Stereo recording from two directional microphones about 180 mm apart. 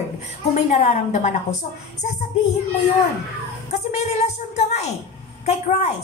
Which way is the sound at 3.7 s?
40° left (ahead or behind).